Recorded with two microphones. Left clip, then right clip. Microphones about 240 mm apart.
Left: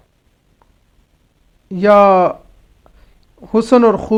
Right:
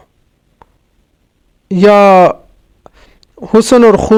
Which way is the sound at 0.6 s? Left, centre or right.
Right.